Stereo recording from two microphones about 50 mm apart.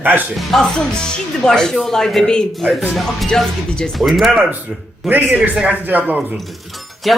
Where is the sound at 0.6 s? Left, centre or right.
Centre.